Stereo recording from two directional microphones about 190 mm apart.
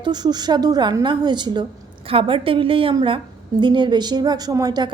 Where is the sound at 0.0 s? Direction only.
20° right (ahead or behind).